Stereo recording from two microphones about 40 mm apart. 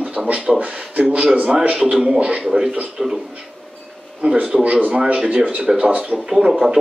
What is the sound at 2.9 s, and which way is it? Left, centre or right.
Speech, centre.